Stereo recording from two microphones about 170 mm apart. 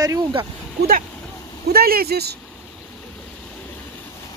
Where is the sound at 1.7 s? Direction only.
65° right (ahead or behind).